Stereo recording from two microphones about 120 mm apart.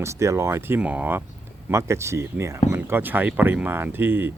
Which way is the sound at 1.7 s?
25° right (ahead or behind).